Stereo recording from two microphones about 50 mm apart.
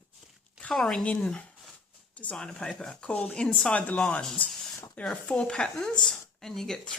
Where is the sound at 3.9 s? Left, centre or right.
Left.